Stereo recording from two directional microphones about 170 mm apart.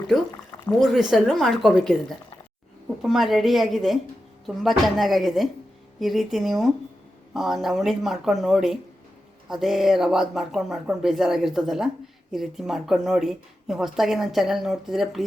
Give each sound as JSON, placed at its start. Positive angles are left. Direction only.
{"t": 0.8, "sound": "speech", "side_deg": 0}